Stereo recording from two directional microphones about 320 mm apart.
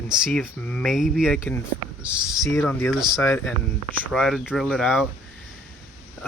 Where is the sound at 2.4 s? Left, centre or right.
Centre.